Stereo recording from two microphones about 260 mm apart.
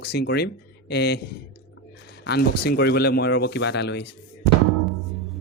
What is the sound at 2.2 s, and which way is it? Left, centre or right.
Speech, left.